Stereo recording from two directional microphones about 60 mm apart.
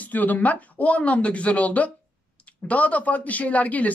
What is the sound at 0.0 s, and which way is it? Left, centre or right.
A woman's voice, left.